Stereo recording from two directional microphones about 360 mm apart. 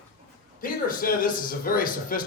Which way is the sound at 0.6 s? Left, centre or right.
Left.